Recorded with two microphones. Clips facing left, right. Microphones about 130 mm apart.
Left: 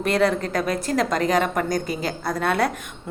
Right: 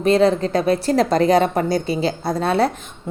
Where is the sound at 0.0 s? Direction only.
25° right (ahead or behind).